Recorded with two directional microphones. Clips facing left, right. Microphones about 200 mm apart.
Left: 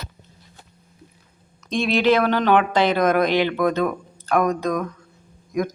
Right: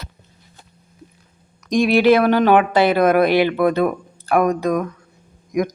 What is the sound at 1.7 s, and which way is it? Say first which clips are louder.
Speech: right 5 dB; 10° right (ahead or behind).